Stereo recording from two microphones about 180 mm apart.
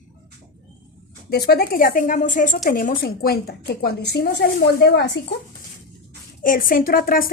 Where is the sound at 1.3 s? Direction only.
60° left (ahead or behind).